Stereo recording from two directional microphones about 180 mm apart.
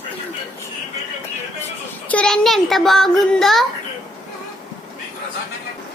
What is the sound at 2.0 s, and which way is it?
A child's voice, 5° left (ahead or behind).